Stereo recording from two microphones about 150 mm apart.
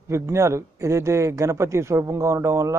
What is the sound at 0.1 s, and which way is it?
A man's voice, 20° right (ahead or behind).